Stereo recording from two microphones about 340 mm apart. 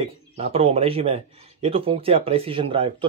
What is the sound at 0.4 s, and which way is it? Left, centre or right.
A man's voice, centre.